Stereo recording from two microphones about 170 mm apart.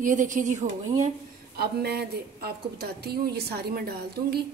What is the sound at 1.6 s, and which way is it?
A woman's voice, 70° right (ahead or behind).